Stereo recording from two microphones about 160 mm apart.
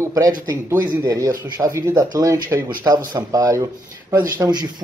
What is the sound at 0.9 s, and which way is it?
Speech, 20° right (ahead or behind).